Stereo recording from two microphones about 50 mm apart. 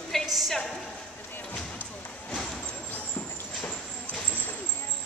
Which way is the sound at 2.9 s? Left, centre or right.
Left.